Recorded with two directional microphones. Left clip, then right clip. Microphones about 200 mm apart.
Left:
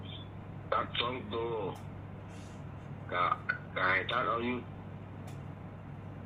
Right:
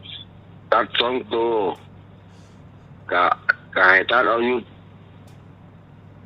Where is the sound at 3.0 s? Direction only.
55° right (ahead or behind).